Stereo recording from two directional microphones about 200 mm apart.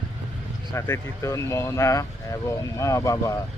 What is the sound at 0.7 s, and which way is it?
Speech, 15° left (ahead or behind).